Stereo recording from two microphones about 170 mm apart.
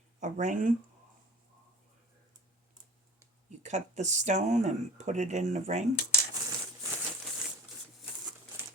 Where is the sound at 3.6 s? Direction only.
45° right (ahead or behind).